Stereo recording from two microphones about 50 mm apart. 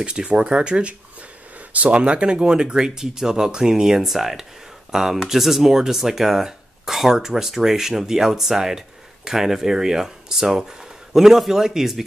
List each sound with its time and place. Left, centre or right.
0.0 s speech: centre